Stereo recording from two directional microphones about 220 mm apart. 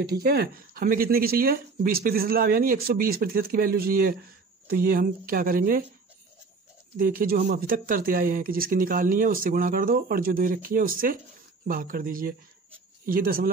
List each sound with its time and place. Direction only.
0.1 s speech: 45° right (ahead or behind)
7.0 s speech: 40° right (ahead or behind)